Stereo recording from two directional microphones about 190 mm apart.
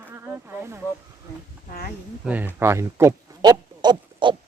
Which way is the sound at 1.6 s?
50° left (ahead or behind).